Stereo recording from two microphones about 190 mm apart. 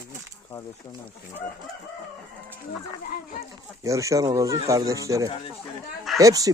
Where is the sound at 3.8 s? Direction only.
15° right (ahead or behind).